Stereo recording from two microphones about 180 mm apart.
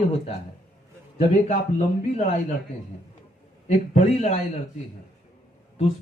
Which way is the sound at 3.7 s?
40° left (ahead or behind).